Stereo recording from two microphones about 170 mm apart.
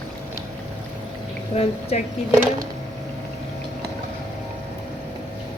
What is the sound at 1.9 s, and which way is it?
Speech, 40° left (ahead or behind).